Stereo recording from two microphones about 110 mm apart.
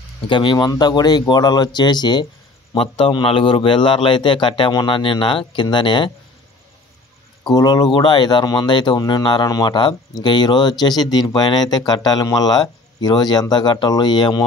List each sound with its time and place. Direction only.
0.3 s a man's voice: 45° left (ahead or behind)
2.7 s a man's voice: 50° left (ahead or behind)
7.4 s speech: 40° left (ahead or behind)